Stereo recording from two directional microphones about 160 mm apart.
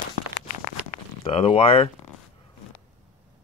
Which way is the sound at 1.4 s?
35° left (ahead or behind).